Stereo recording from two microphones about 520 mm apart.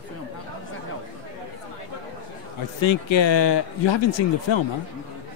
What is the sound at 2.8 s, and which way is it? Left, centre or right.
Speech, left.